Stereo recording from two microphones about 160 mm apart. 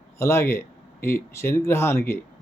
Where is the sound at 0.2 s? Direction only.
15° left (ahead or behind).